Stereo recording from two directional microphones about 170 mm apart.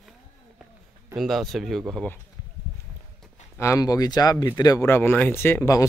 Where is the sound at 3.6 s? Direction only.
20° left (ahead or behind).